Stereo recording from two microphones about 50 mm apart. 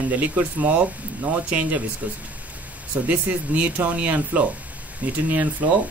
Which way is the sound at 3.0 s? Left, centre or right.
Right.